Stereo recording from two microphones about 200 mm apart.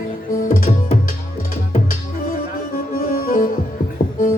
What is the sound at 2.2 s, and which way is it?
Music, 45° left (ahead or behind).